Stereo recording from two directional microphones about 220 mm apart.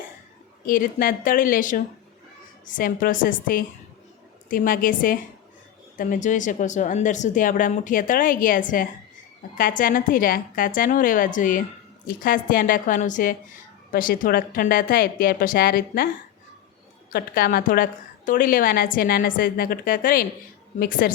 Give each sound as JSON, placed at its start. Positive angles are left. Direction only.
{"t": 0.6, "sound": "speech", "side_deg": 40}
{"t": 17.1, "sound": "speech", "side_deg": 40}